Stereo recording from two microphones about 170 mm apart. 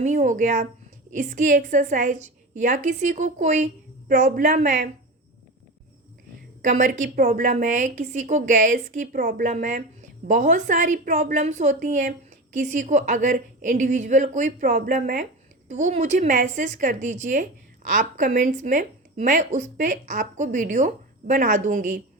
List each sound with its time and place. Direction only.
0.0 s a woman's voice: 45° right (ahead or behind)
6.6 s a woman's voice: 50° right (ahead or behind)